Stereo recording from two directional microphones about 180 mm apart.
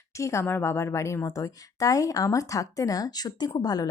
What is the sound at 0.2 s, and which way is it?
Speech, 15° left (ahead or behind).